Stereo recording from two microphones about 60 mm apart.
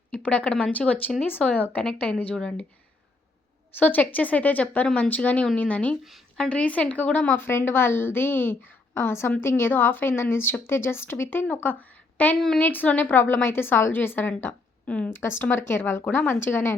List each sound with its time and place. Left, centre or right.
0.1 s a woman's voice: left
3.8 s a woman's voice: left
7.3 s a woman's voice: left
14.8 s speech: left
15.1 s a woman's voice: left